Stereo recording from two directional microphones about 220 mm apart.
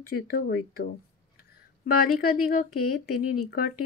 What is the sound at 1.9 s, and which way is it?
Speech, 90° left.